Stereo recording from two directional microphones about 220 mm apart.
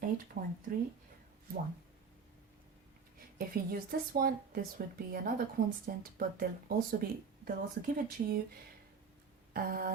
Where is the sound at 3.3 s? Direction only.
40° right (ahead or behind).